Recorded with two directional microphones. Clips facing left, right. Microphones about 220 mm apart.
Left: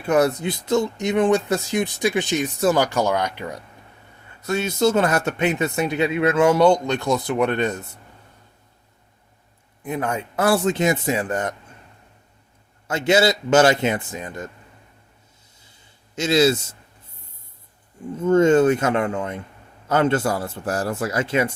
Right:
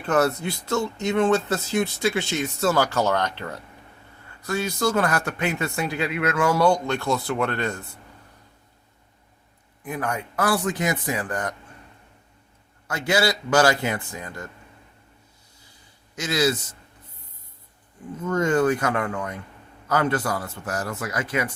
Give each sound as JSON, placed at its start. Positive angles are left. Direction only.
{"t": 0.0, "sound": "speech", "side_deg": 15}
{"t": 9.8, "sound": "speech", "side_deg": 25}
{"t": 12.9, "sound": "speech", "side_deg": 20}
{"t": 16.1, "sound": "speech", "side_deg": 25}
{"t": 18.2, "sound": "speech", "side_deg": 25}